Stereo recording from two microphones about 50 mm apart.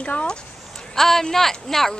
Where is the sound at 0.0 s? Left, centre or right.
Left.